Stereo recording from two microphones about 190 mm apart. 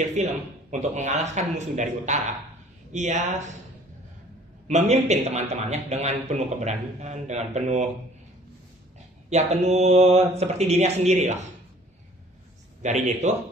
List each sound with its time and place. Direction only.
0.0 s a man's voice: 40° right (ahead or behind)
4.6 s a man's voice: 35° right (ahead or behind)
9.3 s a man's voice: 35° right (ahead or behind)
12.8 s a man's voice: 35° right (ahead or behind)